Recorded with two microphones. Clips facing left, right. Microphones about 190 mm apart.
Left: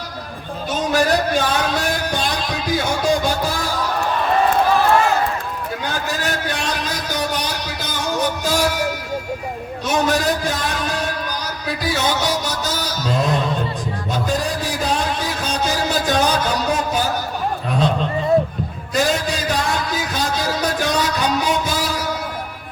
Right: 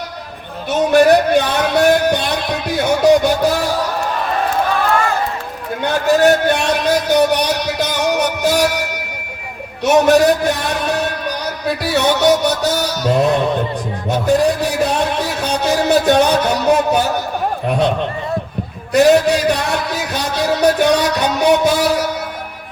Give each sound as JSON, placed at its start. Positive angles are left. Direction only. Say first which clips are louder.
{"t": 0.7, "sound": "speech", "louder": "right 8 dB", "side_deg": -65}
{"t": 5.8, "sound": "a man's voice", "louder": "right 14 dB", "side_deg": -65}
{"t": 9.8, "sound": "music", "louder": "right 8 dB", "side_deg": -65}
{"t": 18.9, "sound": "a sound", "louder": "right 9 dB", "side_deg": -65}